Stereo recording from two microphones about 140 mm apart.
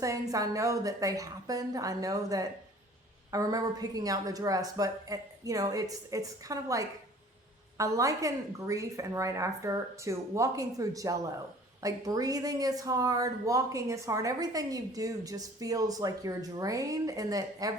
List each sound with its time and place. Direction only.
0.0 s speech: 25° right (ahead or behind)